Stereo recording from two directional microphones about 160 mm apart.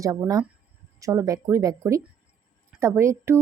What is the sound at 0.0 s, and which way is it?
Speech, 20° right (ahead or behind).